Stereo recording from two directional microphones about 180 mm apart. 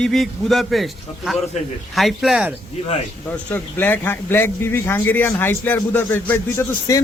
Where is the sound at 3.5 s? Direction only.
10° left (ahead or behind).